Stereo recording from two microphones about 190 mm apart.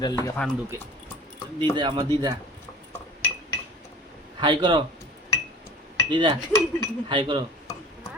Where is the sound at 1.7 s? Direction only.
25° right (ahead or behind).